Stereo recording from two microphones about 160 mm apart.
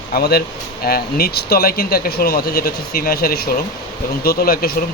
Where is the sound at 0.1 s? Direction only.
75° left (ahead or behind).